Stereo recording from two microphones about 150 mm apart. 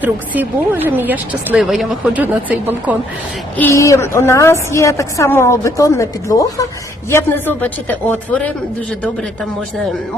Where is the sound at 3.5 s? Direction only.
15° left (ahead or behind).